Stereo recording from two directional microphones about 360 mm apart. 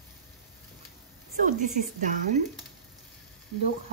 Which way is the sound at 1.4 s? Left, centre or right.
Right.